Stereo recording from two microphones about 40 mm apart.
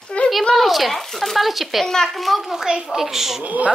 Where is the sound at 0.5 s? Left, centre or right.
Centre.